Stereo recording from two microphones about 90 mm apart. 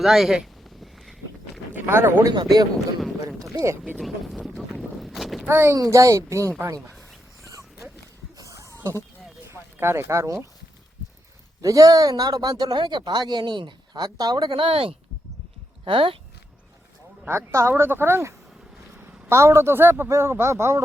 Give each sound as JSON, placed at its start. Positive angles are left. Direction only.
{"t": 0.0, "sound": "a sound", "side_deg": 0}
{"t": 1.7, "sound": "speech", "side_deg": -30}
{"t": 2.3, "sound": "speech", "side_deg": -50}
{"t": 3.5, "sound": "speech", "side_deg": -40}
{"t": 3.9, "sound": "speech", "side_deg": 0}
{"t": 4.5, "sound": "a sound", "side_deg": 0}
{"t": 5.5, "sound": "a man's voice", "side_deg": -30}
{"t": 8.4, "sound": "a sound", "side_deg": -35}
{"t": 9.5, "sound": "speech", "side_deg": -30}
{"t": 11.6, "sound": "speech", "side_deg": -40}
{"t": 14.5, "sound": "speech", "side_deg": -85}
{"t": 17.2, "sound": "a man's voice", "side_deg": -30}
{"t": 18.9, "sound": "a sound", "side_deg": -10}
{"t": 19.3, "sound": "a man's voice", "side_deg": -30}